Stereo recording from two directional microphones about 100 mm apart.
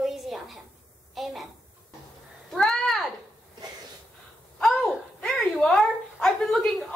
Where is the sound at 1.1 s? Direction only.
Centre (ahead or behind).